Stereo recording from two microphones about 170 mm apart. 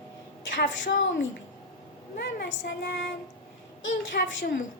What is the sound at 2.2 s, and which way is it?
Child singing, 80° left.